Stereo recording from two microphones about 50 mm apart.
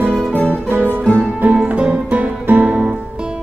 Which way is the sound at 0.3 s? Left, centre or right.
Left.